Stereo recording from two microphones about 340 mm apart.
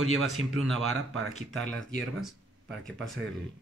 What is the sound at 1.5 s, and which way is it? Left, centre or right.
Speech, centre.